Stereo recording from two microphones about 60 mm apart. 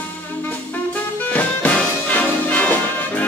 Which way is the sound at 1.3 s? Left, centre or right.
Left.